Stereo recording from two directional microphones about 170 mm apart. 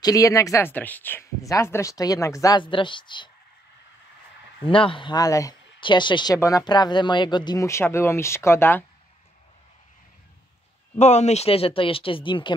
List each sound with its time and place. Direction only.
0.0 s speech: 20° left (ahead or behind)
4.6 s speech: 30° left (ahead or behind); by 8.8 s 15° left (ahead or behind)
11.0 s speech: 40° left (ahead or behind)